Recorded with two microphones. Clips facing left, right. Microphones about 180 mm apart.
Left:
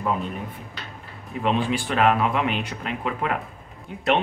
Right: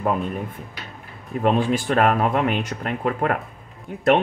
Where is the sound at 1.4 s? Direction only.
45° right (ahead or behind).